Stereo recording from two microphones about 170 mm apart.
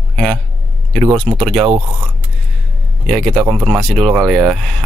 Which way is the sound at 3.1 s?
5° left (ahead or behind).